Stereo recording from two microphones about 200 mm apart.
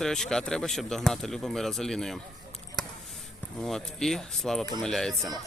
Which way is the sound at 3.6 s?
Centre (ahead or behind).